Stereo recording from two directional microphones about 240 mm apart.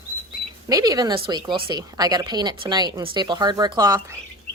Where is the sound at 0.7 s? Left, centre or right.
Centre.